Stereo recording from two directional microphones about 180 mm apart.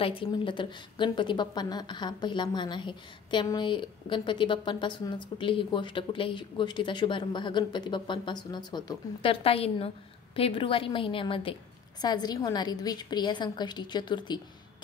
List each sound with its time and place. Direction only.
0.0 s a woman's voice: 30° left (ahead or behind)